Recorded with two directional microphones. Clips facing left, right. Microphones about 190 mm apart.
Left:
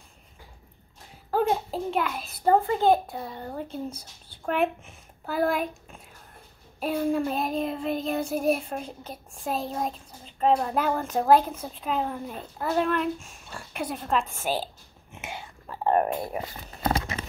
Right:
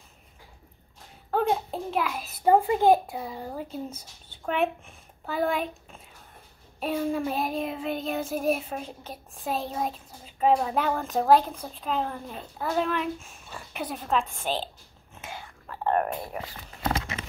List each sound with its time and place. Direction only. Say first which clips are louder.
1.3 s a child's voice: left 1 dB; centre (ahead or behind)
6.8 s child singing: left 2 dB; centre (ahead or behind)
15.1 s whispering: left 2 dB; 20° left (ahead or behind)
16.8 s patter: left 2 dB; 40° left (ahead or behind)